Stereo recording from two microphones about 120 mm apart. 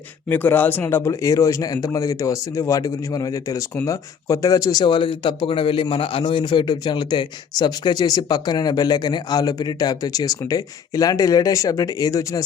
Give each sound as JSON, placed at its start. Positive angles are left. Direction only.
{"t": 0.3, "sound": "a man's voice", "side_deg": 15}